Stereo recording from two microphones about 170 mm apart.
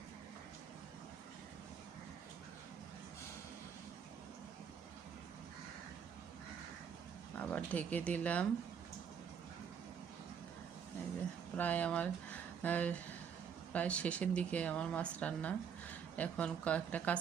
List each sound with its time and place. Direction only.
7.3 s speech: 10° left (ahead or behind)
11.5 s speech: 10° left (ahead or behind)